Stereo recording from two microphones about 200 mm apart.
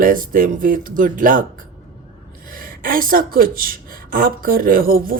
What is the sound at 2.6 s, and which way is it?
A woman's voice, 45° right (ahead or behind).